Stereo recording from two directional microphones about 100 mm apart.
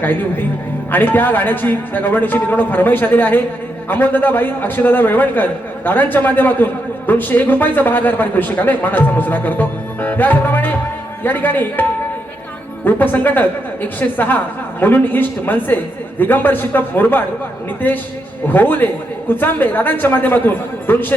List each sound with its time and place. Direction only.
0.0 s speech: 20° left (ahead or behind)